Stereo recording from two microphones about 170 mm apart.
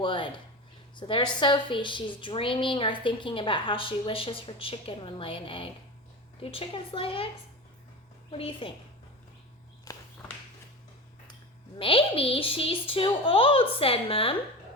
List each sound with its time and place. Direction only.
0.0 s a woman's voice: 30° left (ahead or behind)
8.3 s a woman's voice: 30° left (ahead or behind)
9.9 s a sound: 20° left (ahead or behind)
11.8 s a woman's voice: 30° left (ahead or behind)